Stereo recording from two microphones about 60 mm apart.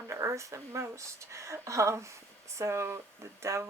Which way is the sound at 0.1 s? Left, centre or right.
Right.